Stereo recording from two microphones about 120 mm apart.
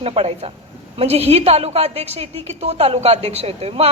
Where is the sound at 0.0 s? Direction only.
55° right (ahead or behind).